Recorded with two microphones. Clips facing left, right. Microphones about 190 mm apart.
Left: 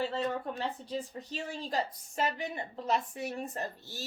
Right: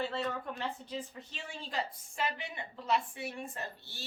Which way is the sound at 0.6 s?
35° left (ahead or behind).